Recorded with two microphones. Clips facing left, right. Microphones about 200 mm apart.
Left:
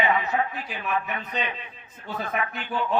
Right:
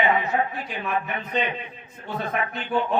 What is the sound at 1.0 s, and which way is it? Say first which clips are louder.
A man's voice: right 4 dB; 25° right (ahead or behind).